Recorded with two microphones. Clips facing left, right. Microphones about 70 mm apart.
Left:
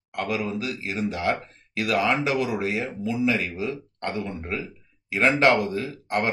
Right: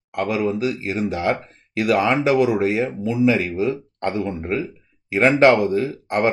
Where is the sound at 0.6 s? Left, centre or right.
Right.